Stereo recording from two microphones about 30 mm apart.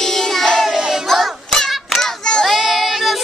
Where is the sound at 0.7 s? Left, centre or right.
Centre.